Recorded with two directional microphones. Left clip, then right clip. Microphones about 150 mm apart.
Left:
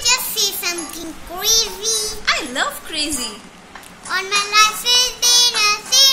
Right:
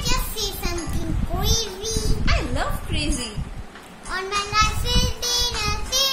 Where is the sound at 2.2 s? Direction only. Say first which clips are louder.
Left 7 dB; centre (ahead or behind).